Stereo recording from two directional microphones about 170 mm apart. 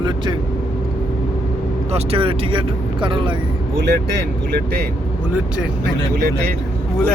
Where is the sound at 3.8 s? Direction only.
75° right (ahead or behind).